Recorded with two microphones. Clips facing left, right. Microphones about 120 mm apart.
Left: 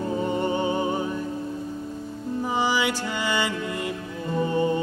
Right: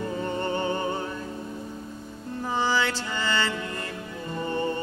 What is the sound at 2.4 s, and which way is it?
Music, 15° left (ahead or behind).